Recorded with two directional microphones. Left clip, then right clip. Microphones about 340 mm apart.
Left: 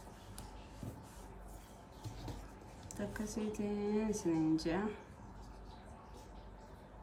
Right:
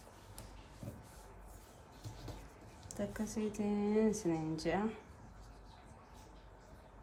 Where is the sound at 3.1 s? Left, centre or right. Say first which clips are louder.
Left 1 dB; centre.